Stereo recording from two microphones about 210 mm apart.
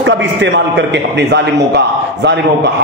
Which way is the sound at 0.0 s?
55° right (ahead or behind).